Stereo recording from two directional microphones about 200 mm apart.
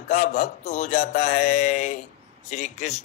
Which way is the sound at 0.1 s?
35° left (ahead or behind).